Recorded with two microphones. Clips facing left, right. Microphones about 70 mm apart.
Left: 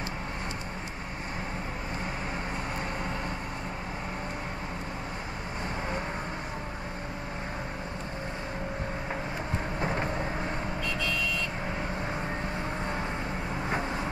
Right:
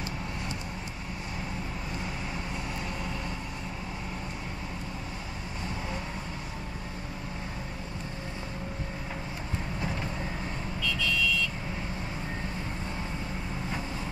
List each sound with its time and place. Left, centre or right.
9.8 s vehicle: left
13.7 s vehicle: left